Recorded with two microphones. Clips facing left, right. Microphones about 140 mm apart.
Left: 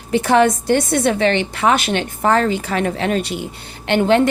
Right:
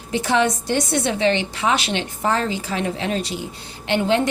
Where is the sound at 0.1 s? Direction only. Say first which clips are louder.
Left 5 dB; 55° left (ahead or behind).